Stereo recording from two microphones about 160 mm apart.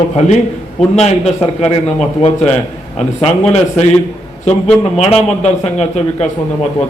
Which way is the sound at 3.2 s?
40° left (ahead or behind).